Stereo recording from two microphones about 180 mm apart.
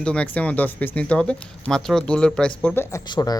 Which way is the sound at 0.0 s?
5° left (ahead or behind).